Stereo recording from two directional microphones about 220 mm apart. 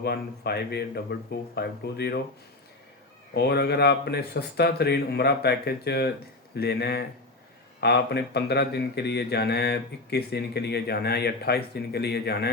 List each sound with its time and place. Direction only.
0.0 s speech: 45° left (ahead or behind)
3.3 s speech: 50° left (ahead or behind)